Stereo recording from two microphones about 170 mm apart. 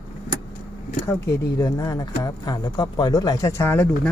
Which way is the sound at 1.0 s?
20° left (ahead or behind).